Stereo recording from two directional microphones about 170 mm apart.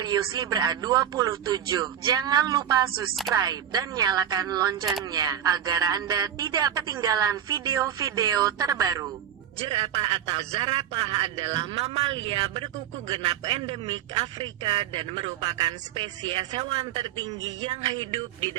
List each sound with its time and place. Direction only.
0.0 s speech: 25° right (ahead or behind)
9.6 s a man's voice: 35° right (ahead or behind)